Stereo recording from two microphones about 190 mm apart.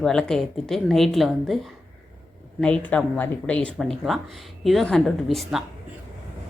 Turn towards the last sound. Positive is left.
turn(degrees=0)  # may be behind; listen again after turning